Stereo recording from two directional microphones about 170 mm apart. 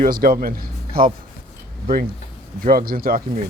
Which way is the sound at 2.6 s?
55° right (ahead or behind).